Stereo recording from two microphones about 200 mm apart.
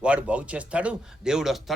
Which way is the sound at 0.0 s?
5° right (ahead or behind).